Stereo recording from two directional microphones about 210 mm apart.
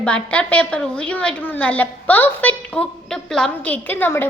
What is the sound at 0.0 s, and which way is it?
A woman's voice, 5° left (ahead or behind).